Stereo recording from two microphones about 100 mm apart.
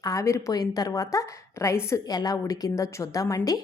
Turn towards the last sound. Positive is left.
turn(degrees=35)  # may be behind; listen again after turning